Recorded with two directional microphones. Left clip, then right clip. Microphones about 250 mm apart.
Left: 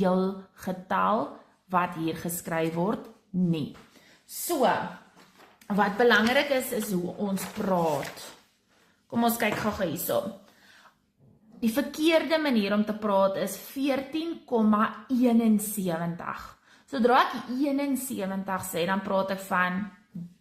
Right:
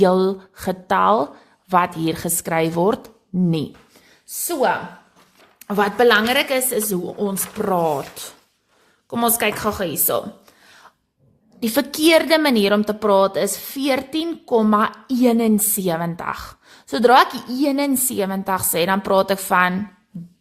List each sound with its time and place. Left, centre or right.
0.0 s a woman's voice: right
5.6 s a woman's voice: right
9.0 s a woman's voice: right
11.6 s a woman's voice: right